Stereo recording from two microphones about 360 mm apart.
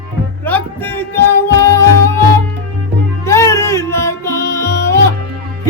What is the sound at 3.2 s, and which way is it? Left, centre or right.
Music, centre.